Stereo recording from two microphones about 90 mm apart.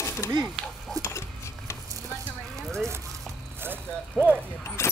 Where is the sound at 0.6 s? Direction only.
5° right (ahead or behind).